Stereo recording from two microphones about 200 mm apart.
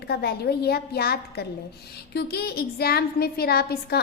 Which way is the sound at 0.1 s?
50° left (ahead or behind).